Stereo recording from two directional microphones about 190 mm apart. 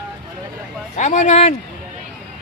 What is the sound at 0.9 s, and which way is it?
Speech, 40° left (ahead or behind).